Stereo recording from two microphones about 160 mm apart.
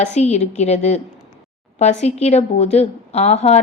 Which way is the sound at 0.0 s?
45° left (ahead or behind).